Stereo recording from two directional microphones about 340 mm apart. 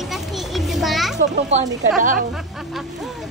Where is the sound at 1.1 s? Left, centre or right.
Centre.